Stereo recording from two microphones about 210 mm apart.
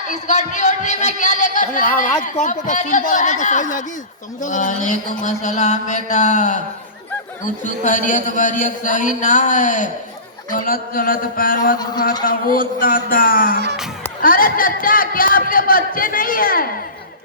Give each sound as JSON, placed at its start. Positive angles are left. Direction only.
{"t": 0.1, "sound": "a man's voice", "side_deg": 35}
{"t": 7.6, "sound": "a man's voice", "side_deg": 35}